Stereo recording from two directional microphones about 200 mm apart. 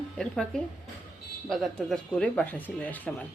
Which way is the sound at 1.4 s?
Centre (ahead or behind).